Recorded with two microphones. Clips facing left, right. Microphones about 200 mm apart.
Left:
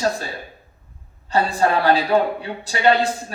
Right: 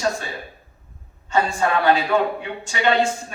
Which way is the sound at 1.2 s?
35° left (ahead or behind).